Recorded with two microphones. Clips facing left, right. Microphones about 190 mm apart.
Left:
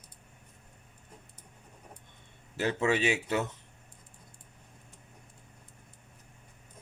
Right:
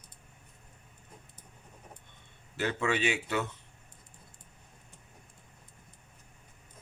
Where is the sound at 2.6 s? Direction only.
40° left (ahead or behind).